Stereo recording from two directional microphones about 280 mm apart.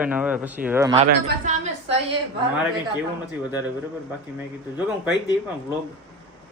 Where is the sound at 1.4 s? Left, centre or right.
Right.